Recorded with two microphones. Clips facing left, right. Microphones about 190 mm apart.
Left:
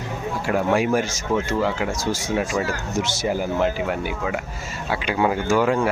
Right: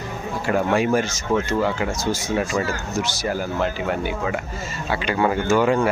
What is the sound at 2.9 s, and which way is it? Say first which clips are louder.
Speech: left 3 dB; 25° left (ahead or behind).